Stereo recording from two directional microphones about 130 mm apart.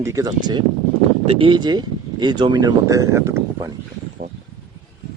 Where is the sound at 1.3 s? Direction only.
45° right (ahead or behind); by 3.7 s 25° right (ahead or behind).